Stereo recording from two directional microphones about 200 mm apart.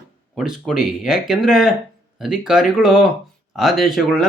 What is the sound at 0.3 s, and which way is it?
Speech, centre (ahead or behind).